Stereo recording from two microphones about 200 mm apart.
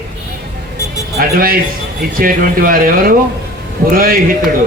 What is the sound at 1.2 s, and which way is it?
A man's voice, 45° right (ahead or behind).